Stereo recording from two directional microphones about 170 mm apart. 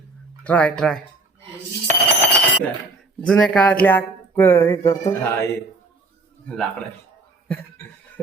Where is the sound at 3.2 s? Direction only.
10° left (ahead or behind).